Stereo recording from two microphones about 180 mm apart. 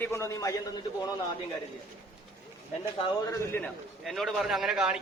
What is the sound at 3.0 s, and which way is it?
Speech, 25° left (ahead or behind).